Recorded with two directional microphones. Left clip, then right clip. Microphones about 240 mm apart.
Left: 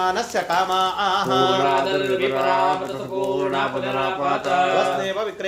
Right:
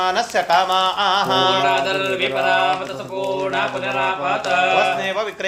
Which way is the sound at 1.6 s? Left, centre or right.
Centre.